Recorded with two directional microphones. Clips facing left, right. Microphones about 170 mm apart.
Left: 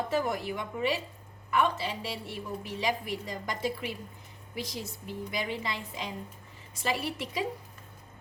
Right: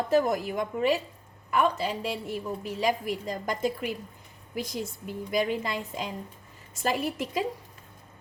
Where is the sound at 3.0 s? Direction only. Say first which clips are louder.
Right 4 dB; 45° right (ahead or behind).